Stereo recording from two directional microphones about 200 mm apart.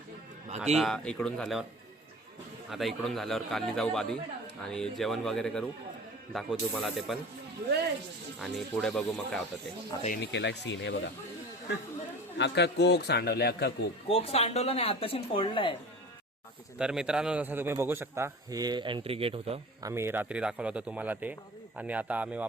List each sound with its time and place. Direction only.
0.8 s a man's voice: 5° left (ahead or behind)
2.6 s a man's voice: centre (ahead or behind)
8.4 s a man's voice: centre (ahead or behind)
10.2 s a man's voice: 60° left (ahead or behind)
12.4 s a man's voice: 60° left (ahead or behind)
14.1 s speech: 30° left (ahead or behind)
16.7 s a man's voice: 5° right (ahead or behind); by 19.5 s 30° right (ahead or behind)
19.8 s a man's voice: 15° right (ahead or behind)